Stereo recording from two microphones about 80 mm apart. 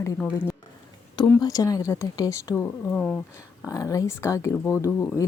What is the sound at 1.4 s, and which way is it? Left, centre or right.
Speech, left.